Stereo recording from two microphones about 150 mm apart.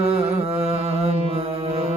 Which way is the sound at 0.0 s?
40° right (ahead or behind).